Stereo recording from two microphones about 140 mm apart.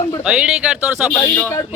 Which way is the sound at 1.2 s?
15° left (ahead or behind).